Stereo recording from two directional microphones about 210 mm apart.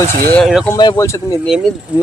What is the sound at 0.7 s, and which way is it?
Speech, 15° left (ahead or behind).